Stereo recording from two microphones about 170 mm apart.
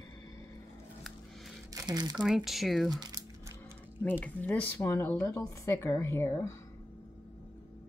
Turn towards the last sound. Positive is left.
turn(degrees=15)  # may be behind; listen again after turning